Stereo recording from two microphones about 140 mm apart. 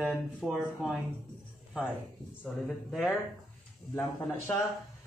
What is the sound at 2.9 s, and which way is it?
Speech, centre (ahead or behind).